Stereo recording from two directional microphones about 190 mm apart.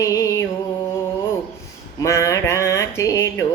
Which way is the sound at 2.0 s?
15° left (ahead or behind).